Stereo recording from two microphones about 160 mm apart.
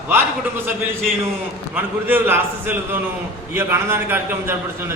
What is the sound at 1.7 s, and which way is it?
A man's voice, 15° right (ahead or behind).